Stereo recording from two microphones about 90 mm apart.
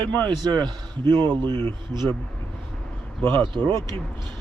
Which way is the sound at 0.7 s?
55° right (ahead or behind).